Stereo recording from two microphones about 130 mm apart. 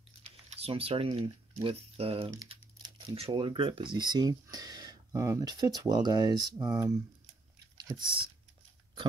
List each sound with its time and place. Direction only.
0.2 s speech: 45° right (ahead or behind); by 7.0 s 25° right (ahead or behind)
7.9 s speech: 40° right (ahead or behind)